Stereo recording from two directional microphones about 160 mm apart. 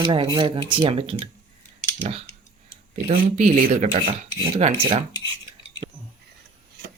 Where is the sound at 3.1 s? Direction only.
50° right (ahead or behind).